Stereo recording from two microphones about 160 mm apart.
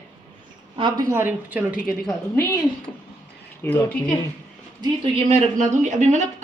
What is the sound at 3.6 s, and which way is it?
Speech, 10° left (ahead or behind).